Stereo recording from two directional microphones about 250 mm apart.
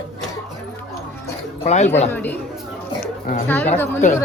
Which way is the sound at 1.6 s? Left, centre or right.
Left.